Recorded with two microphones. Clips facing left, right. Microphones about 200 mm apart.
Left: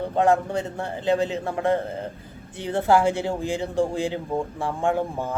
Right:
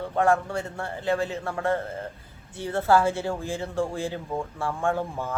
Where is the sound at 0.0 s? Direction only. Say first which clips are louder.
Left 3 dB; 20° left (ahead or behind).